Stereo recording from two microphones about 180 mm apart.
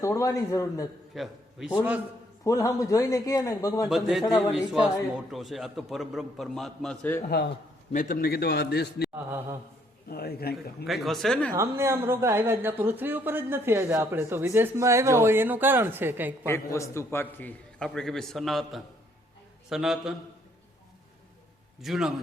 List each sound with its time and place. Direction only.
0.0 s a man's voice: 15° left (ahead or behind)
1.1 s a man's voice: centre (ahead or behind)
2.4 s a man's voice: 20° left (ahead or behind)
3.8 s a man's voice: centre (ahead or behind)
4.2 s a man's voice: 20° left (ahead or behind)
4.5 s a man's voice: centre (ahead or behind)
7.9 s a man's voice: 50° left (ahead or behind); by 9.0 s 65° left (ahead or behind)
9.1 s speech: 15° right (ahead or behind)
10.1 s a man's voice: 60° left (ahead or behind)
10.8 s a man's voice: centre (ahead or behind)
11.5 s speech: 15° right (ahead or behind)
16.5 s a man's voice: 15° left (ahead or behind); by 20.1 s centre (ahead or behind)
21.8 s a man's voice: centre (ahead or behind)